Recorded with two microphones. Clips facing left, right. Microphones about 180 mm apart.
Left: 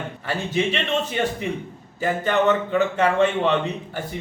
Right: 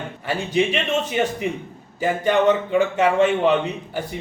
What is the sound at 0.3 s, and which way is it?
Speech, 15° right (ahead or behind).